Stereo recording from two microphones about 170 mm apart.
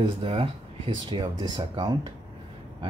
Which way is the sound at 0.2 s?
30° right (ahead or behind).